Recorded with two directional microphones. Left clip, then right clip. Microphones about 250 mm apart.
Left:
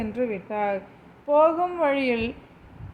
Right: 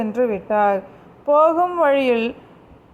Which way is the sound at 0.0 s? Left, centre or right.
Centre.